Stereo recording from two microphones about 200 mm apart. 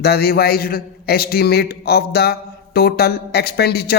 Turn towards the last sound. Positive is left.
turn(degrees=50)  # may be behind; listen again after turning